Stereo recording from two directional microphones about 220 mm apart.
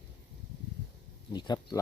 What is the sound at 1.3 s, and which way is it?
Speech, 20° left (ahead or behind).